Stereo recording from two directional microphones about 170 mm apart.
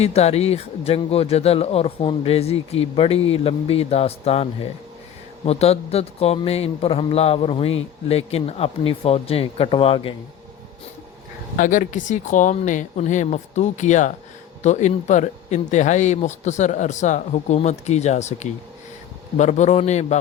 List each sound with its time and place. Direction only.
0.0 s a man's voice: 40° left (ahead or behind)
11.5 s a man's voice: 50° left (ahead or behind)